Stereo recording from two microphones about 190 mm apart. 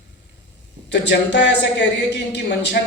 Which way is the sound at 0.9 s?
65° left (ahead or behind).